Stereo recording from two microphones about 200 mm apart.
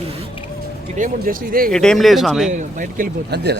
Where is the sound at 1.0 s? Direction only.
45° right (ahead or behind).